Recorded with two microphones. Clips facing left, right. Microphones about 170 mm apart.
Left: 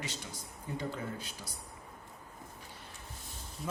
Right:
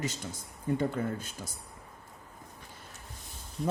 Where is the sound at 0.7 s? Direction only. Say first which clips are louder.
Right 7 dB; 50° right (ahead or behind).